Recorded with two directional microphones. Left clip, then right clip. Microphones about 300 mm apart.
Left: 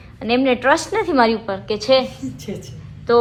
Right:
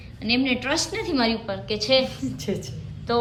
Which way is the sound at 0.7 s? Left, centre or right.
Centre.